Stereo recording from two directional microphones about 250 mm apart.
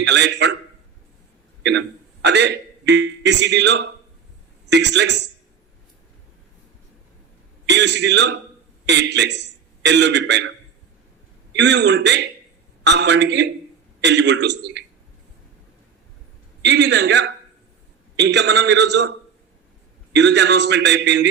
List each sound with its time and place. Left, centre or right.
0.0 s a man's voice: right
2.2 s a man's voice: right
7.7 s a man's voice: right
11.5 s a man's voice: right
16.6 s a man's voice: right
20.1 s a man's voice: right